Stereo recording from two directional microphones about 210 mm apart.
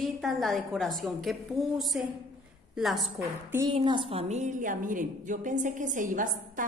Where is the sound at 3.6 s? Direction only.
20° right (ahead or behind).